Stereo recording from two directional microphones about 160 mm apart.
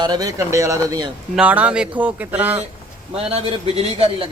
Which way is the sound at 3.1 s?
35° right (ahead or behind).